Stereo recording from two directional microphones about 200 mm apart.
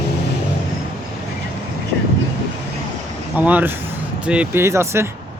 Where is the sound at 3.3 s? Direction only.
10° right (ahead or behind).